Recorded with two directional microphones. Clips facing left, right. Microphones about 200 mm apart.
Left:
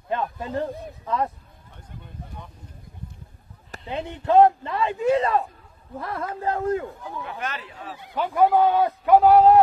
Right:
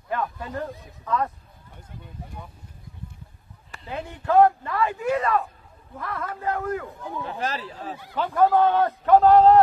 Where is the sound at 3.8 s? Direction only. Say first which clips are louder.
Left 2 dB; 20° left (ahead or behind).